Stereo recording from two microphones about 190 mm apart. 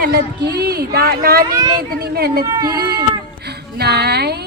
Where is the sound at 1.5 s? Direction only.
20° right (ahead or behind).